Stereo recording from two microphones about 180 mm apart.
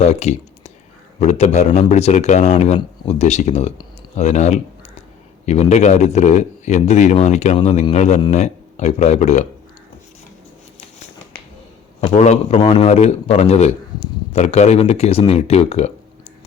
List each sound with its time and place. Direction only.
0.0 s a man's voice: 35° left (ahead or behind)
12.1 s a man's voice: 40° left (ahead or behind)